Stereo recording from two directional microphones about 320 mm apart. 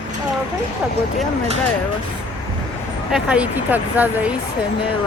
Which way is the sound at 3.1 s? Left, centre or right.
Centre.